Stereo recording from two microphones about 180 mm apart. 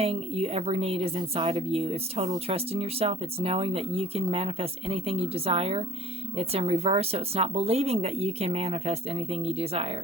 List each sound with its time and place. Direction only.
0.0 s speech: 35° right (ahead or behind)